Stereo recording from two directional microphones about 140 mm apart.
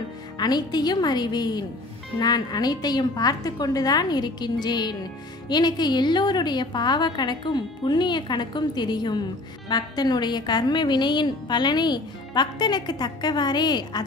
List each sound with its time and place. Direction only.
0.4 s a woman's voice: 30° left (ahead or behind)